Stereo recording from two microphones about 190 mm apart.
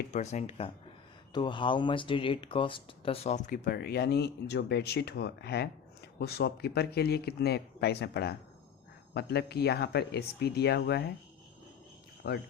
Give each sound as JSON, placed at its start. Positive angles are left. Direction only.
{"t": 0.1, "sound": "speech", "side_deg": 35}
{"t": 12.2, "sound": "speech", "side_deg": 55}